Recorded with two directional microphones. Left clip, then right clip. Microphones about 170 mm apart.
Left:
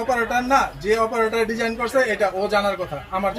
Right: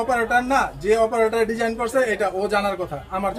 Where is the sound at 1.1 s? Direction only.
40° right (ahead or behind).